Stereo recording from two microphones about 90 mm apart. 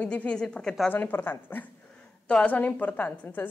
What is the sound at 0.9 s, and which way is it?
A woman's voice, 20° left (ahead or behind).